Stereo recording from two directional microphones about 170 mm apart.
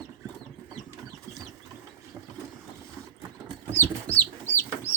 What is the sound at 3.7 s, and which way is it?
Chicken, 10° left (ahead or behind).